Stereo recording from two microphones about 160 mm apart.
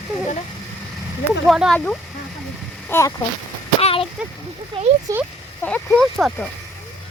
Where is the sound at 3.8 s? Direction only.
40° left (ahead or behind).